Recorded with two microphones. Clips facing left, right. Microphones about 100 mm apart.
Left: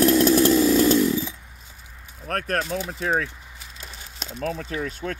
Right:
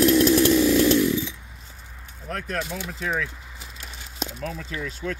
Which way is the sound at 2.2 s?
65° left (ahead or behind).